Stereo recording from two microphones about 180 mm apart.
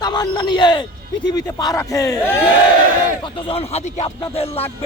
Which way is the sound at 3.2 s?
30° left (ahead or behind).